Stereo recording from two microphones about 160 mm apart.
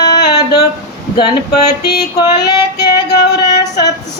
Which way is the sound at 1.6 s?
25° left (ahead or behind).